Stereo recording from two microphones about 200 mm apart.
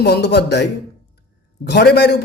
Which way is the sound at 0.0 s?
55° left (ahead or behind).